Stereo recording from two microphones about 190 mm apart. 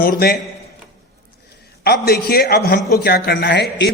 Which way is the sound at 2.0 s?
55° left (ahead or behind).